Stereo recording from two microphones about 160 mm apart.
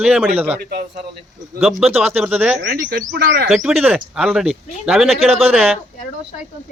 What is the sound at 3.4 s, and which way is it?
Speech, 5° right (ahead or behind).